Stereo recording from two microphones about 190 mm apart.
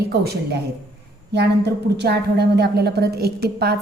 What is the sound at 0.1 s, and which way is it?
A woman's voice, 55° right (ahead or behind).